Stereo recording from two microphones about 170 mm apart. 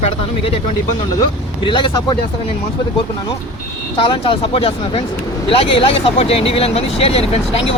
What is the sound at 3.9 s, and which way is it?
Speech, 30° left (ahead or behind).